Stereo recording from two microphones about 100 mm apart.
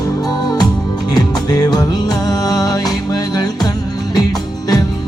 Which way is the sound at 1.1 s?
40° left (ahead or behind).